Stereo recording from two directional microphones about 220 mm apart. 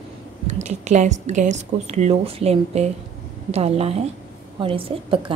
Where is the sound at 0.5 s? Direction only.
30° right (ahead or behind).